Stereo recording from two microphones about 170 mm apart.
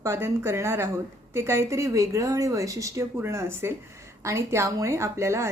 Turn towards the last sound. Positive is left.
turn(degrees=-15)  # may be behind; listen again after turning